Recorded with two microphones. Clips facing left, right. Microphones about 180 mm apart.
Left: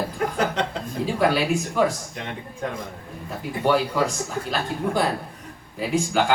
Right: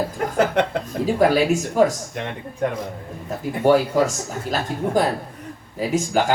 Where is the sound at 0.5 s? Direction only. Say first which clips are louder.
Right 5 dB; 60° right (ahead or behind).